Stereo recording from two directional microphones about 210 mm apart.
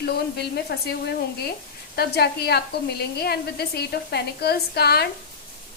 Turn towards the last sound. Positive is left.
turn(degrees=50)  # may be behind; listen again after turning